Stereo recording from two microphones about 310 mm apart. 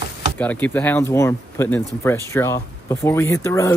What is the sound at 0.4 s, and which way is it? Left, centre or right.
Speech, centre.